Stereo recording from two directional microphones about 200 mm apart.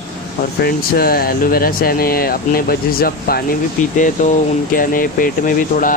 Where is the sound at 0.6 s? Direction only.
50° left (ahead or behind).